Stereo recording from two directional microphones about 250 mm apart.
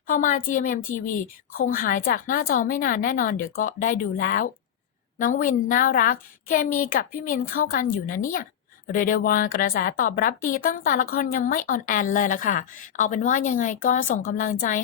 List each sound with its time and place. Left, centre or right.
0.1 s a woman's voice: left